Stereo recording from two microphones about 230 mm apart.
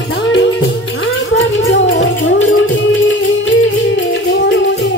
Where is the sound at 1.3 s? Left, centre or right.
Left.